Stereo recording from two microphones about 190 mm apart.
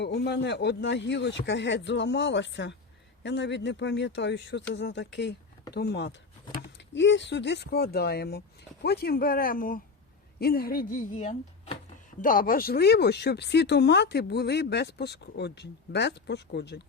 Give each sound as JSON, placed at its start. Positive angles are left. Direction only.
{"t": 0.0, "sound": "speech", "side_deg": 65}
{"t": 12.2, "sound": "speech", "side_deg": 45}